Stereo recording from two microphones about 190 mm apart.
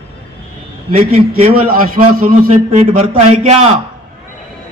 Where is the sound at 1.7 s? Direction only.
50° right (ahead or behind).